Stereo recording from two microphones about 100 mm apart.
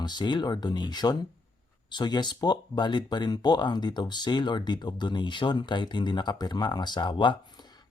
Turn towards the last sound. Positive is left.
turn(degrees=50)  # may be behind; listen again after turning